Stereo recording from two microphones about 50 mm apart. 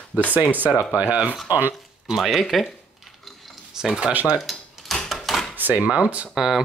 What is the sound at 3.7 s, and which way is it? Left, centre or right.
Speech, centre.